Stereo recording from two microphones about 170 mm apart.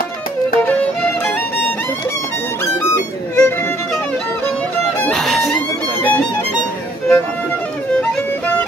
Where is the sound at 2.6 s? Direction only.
15° left (ahead or behind).